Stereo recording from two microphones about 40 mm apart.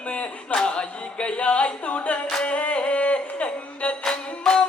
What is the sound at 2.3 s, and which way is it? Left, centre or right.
Music, left.